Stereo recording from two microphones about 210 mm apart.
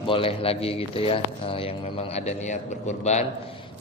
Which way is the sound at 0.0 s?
25° left (ahead or behind).